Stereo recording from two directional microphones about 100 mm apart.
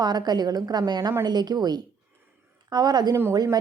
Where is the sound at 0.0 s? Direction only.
45° right (ahead or behind).